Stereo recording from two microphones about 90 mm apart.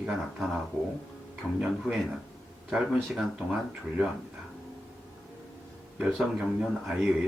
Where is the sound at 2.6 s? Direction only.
5° right (ahead or behind).